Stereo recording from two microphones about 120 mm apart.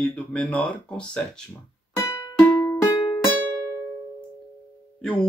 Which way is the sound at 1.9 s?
30° left (ahead or behind).